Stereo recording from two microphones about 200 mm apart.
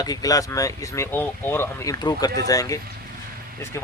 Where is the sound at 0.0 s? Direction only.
20° left (ahead or behind).